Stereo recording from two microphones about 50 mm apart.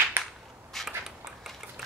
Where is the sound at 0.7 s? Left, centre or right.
Centre.